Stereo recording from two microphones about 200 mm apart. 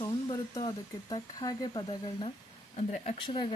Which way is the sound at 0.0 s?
20° left (ahead or behind).